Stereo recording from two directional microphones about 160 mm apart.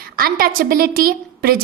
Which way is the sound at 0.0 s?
65° right (ahead or behind).